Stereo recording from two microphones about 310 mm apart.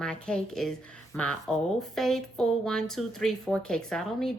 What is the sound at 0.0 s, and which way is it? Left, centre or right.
A woman's voice, centre.